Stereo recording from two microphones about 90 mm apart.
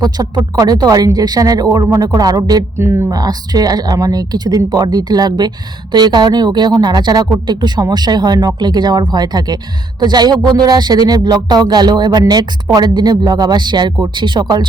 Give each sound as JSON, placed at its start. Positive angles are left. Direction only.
{"t": 0.0, "sound": "speech", "side_deg": -50}
{"t": 2.7, "sound": "speech", "side_deg": -30}
{"t": 3.1, "sound": "speech", "side_deg": -45}